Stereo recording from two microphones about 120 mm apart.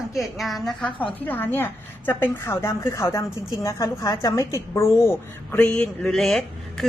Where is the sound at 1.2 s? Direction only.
15° left (ahead or behind).